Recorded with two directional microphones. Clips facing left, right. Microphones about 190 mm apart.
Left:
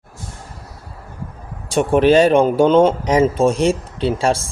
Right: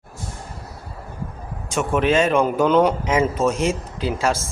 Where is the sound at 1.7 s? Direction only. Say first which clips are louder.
Left 6 dB; 35° left (ahead or behind).